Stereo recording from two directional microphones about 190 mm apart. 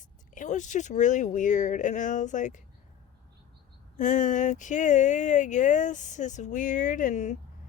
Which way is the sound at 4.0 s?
40° left (ahead or behind).